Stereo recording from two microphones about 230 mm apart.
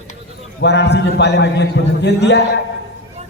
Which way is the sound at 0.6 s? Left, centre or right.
Left.